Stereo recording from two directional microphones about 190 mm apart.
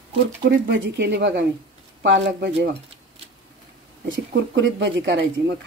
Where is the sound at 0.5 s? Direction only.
75° right (ahead or behind).